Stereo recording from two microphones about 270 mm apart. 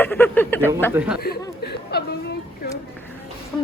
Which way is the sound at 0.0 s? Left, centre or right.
Centre.